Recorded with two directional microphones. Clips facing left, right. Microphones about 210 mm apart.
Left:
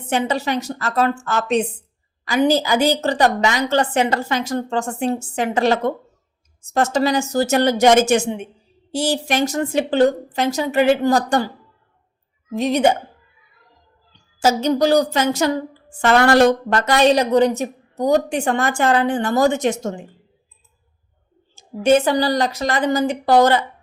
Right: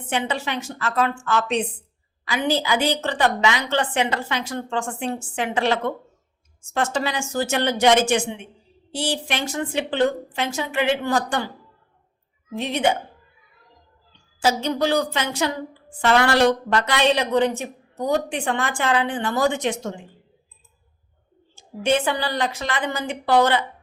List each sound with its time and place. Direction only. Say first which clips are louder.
0.1 s a woman's voice: left 5 dB; 40° left (ahead or behind)
12.5 s a woman's voice: left 5 dB; 40° left (ahead or behind)
14.3 s a woman's voice: left 5 dB; 40° left (ahead or behind)
21.5 s a woman's voice: left 6 dB; 45° left (ahead or behind)